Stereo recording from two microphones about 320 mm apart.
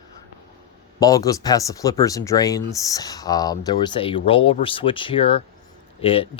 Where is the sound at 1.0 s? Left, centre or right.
Centre.